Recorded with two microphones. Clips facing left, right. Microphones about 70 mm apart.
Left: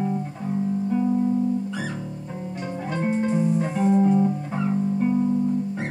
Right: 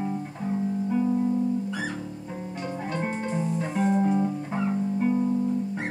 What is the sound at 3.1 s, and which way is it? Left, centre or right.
Music, centre.